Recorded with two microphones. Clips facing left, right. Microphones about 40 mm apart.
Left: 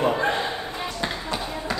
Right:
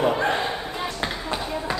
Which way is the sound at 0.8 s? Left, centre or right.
Centre.